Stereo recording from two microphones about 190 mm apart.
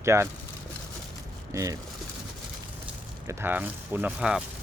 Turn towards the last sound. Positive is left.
turn(degrees=-5)  # may be behind; listen again after turning